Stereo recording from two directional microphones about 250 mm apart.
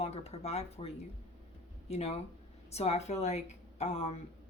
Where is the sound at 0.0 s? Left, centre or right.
Left.